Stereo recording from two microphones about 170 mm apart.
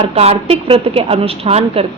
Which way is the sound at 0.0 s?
35° right (ahead or behind).